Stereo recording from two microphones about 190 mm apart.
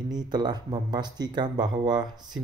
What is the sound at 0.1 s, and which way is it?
Speech, 20° right (ahead or behind).